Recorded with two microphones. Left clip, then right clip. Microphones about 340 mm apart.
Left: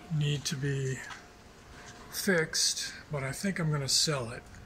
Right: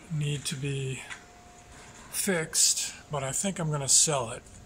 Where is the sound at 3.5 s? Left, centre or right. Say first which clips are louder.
Right 2 dB; centre.